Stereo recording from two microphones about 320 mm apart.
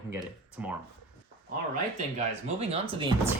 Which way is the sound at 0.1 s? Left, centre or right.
Centre.